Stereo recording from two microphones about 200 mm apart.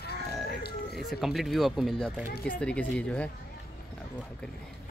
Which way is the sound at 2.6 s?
5° left (ahead or behind).